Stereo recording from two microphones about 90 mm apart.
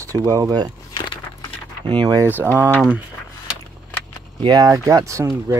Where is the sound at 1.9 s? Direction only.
60° right (ahead or behind).